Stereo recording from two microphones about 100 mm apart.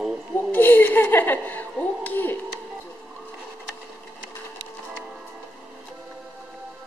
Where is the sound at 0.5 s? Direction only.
20° left (ahead or behind).